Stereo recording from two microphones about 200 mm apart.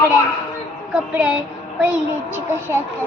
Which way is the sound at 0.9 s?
5° right (ahead or behind).